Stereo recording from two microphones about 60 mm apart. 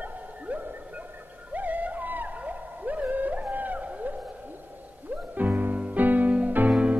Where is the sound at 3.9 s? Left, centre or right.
Right.